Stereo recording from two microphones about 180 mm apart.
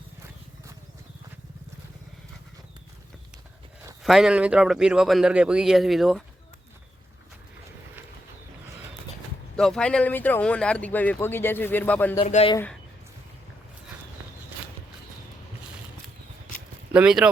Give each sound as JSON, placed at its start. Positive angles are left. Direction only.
{"t": 4.0, "sound": "a man's voice", "side_deg": 0}
{"t": 9.6, "sound": "speech", "side_deg": 5}
{"t": 12.2, "sound": "speech", "side_deg": 35}
{"t": 16.9, "sound": "a man's voice", "side_deg": -5}